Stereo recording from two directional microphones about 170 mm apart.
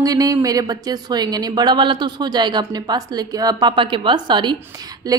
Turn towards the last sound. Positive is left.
turn(degrees=-20)  # may be behind; listen again after turning